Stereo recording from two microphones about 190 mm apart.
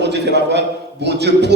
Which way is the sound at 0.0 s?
65° right (ahead or behind).